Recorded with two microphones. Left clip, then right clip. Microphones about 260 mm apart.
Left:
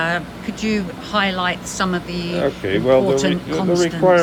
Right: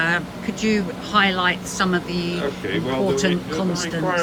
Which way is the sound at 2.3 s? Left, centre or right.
Left.